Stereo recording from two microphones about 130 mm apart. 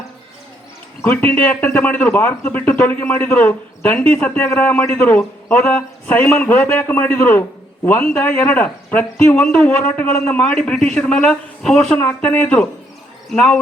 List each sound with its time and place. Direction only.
1.0 s speech: 15° left (ahead or behind)